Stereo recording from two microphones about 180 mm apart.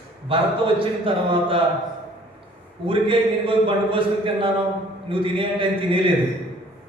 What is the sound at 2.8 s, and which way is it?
Speech, 30° right (ahead or behind).